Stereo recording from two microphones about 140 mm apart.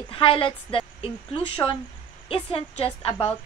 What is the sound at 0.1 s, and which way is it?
A woman's voice, 40° left (ahead or behind).